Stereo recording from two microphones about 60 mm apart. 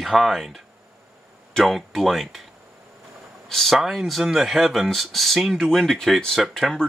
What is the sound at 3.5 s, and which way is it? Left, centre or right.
Speech, centre.